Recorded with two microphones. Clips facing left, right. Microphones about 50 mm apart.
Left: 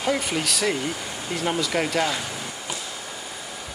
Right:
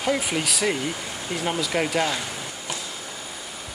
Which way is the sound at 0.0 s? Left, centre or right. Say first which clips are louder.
Even; centre.